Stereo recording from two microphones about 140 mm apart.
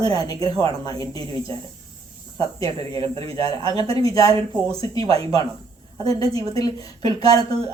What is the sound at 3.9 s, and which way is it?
Speech, 25° left (ahead or behind).